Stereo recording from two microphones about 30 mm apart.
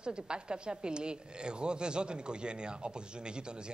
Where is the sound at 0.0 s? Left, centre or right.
Right.